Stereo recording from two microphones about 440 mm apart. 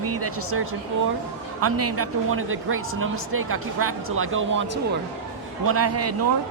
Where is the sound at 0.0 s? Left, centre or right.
Right.